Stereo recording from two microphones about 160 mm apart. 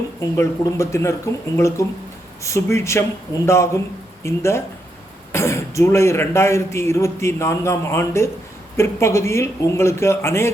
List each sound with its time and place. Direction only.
0.3 s speech: 15° left (ahead or behind)